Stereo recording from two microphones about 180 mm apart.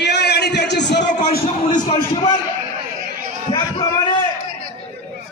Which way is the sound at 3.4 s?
25° left (ahead or behind).